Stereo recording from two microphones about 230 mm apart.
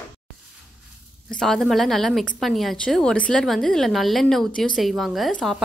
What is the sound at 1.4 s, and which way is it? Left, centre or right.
A woman's voice, centre.